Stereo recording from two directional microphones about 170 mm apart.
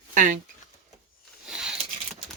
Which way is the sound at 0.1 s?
50° right (ahead or behind).